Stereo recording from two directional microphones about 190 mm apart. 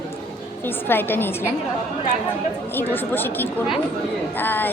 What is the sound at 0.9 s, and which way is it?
Speech, 10° left (ahead or behind).